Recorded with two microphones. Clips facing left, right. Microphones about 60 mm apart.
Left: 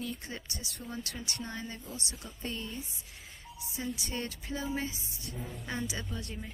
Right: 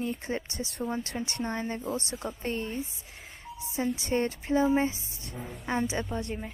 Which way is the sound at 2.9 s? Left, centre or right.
Right.